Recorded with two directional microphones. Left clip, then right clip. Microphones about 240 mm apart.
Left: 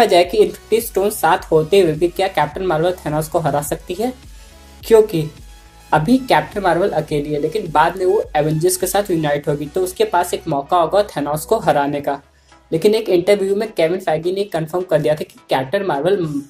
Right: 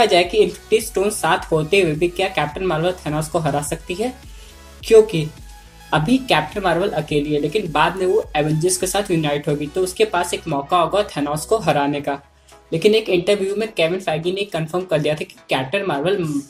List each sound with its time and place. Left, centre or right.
0.0 s speech: centre